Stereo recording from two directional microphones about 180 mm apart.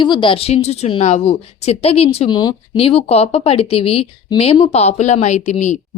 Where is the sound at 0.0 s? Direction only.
25° left (ahead or behind).